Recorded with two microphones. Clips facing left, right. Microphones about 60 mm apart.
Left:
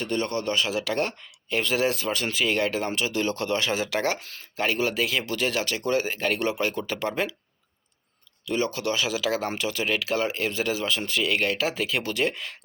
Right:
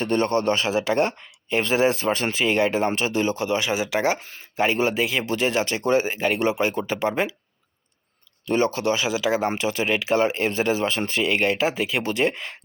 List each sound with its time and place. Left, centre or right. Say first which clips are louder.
0.0 s speech: right 6 dB; right
3.2 s speech: right 1 dB; centre
8.4 s speech: right 5 dB; right